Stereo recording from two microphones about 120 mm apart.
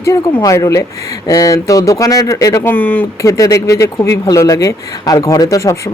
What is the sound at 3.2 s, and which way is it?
Speech, 25° left (ahead or behind).